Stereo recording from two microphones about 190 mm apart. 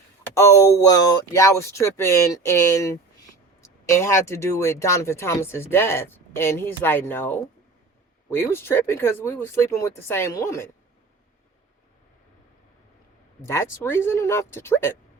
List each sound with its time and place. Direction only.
0.3 s speech: 15° left (ahead or behind)
13.4 s speech: 15° left (ahead or behind)